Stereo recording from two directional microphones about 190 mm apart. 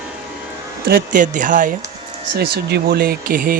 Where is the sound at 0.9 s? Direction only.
45° right (ahead or behind).